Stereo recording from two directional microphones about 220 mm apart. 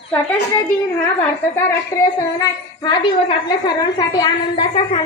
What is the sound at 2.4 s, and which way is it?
A woman's voice, 20° left (ahead or behind).